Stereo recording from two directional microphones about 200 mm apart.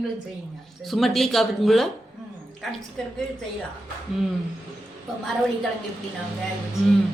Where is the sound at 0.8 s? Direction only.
Centre (ahead or behind).